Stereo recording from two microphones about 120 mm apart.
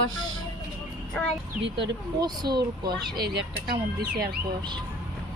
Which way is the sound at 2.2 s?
35° right (ahead or behind).